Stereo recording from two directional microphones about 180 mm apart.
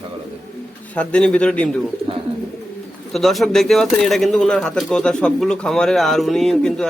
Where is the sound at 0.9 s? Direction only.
5° left (ahead or behind).